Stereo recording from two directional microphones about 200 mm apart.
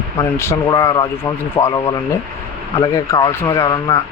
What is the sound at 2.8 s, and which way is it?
Speech, 15° left (ahead or behind).